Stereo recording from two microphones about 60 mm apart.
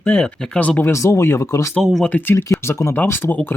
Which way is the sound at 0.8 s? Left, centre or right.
Left.